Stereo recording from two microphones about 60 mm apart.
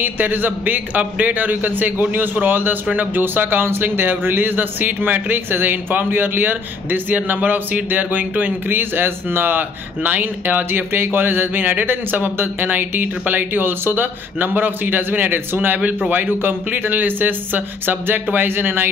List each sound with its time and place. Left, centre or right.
0.0 s a man's voice: right